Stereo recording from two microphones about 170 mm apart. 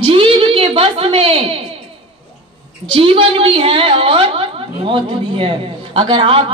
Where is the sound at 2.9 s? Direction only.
30° right (ahead or behind).